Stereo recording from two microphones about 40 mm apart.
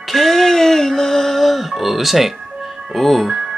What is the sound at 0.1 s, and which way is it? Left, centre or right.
Music, centre.